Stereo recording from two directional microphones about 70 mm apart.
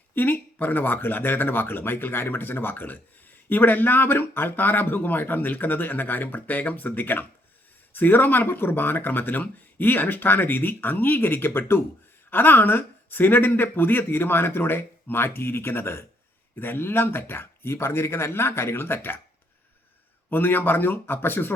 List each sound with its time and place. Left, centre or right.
0.1 s speech: left
20.3 s speech: left